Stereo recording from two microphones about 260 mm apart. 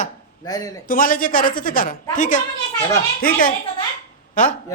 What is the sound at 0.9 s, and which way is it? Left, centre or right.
A woman's voice, left.